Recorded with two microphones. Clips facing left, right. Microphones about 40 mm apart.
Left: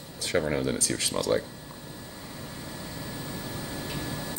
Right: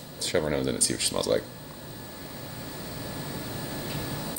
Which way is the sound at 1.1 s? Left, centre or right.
Left.